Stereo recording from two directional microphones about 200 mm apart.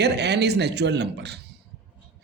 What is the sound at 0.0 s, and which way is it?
Speech, 55° right (ahead or behind).